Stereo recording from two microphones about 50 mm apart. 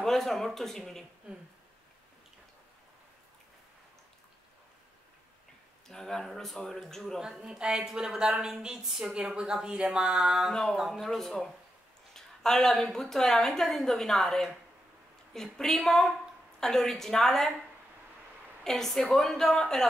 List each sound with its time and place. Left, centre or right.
0.0 s speech: centre
5.9 s speech: centre
7.2 s a woman's voice: centre
10.5 s speech: centre
10.8 s a woman's voice: centre
18.6 s a woman's voice: centre